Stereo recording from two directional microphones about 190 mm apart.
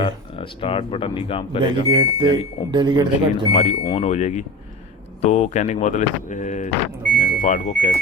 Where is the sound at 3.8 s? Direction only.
30° left (ahead or behind).